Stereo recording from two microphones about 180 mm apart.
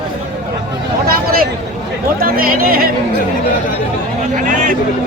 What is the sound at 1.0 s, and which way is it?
Speech, 55° right (ahead or behind).